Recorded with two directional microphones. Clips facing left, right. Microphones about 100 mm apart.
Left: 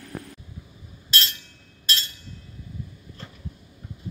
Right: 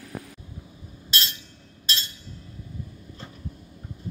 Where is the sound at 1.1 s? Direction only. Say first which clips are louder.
Left 2 dB; 20° right (ahead or behind).